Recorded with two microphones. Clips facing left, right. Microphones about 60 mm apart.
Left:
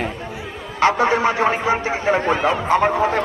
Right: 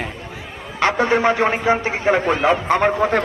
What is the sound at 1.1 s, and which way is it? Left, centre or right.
A man's voice, right.